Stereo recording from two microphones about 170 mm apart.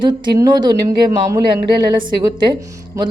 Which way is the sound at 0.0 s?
25° right (ahead or behind).